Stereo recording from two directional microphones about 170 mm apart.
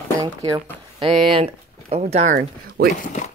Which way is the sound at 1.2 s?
35° right (ahead or behind).